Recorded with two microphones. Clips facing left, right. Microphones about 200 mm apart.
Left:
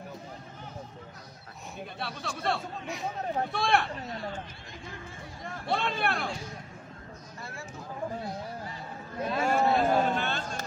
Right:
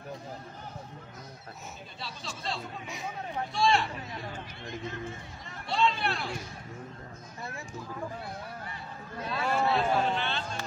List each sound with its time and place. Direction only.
2.0 s speech: 60° left (ahead or behind)
5.4 s speech: 55° left (ahead or behind)
9.4 s a sound: 45° left (ahead or behind)